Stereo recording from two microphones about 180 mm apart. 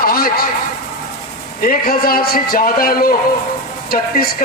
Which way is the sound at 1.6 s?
55° left (ahead or behind).